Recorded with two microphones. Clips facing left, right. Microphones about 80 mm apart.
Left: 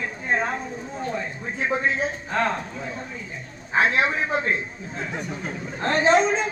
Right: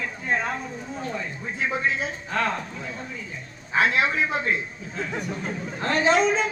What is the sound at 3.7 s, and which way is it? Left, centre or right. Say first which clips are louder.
Speech: left 1 dB; left.